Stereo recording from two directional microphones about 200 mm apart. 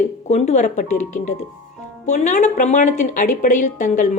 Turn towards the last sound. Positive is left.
turn(degrees=40)  # may be behind; listen again after turning